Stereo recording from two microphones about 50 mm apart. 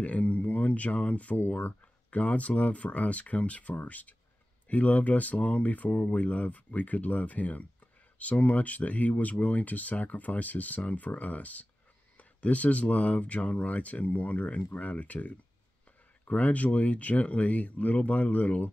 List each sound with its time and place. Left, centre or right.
0.0 s speech: left